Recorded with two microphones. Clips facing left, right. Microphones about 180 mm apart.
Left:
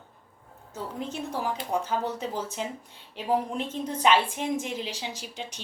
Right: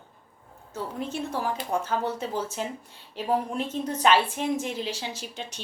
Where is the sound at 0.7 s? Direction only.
15° left (ahead or behind).